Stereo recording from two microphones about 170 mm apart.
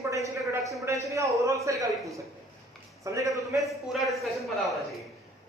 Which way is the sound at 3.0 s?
20° right (ahead or behind).